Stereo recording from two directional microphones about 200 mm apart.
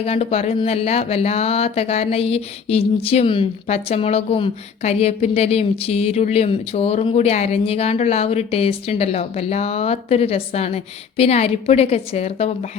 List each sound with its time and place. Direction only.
0.0 s speech: 30° left (ahead or behind)